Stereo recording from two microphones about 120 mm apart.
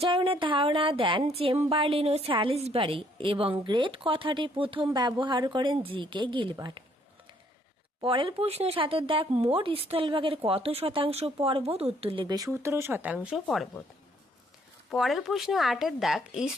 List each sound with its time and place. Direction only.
0.0 s speech: 45° right (ahead or behind)
2.6 s a woman's voice: 65° right (ahead or behind)
2.8 s speech: 45° right (ahead or behind)
8.0 s speech: 45° right (ahead or behind); by 13.7 s centre (ahead or behind)
14.8 s speech: centre (ahead or behind)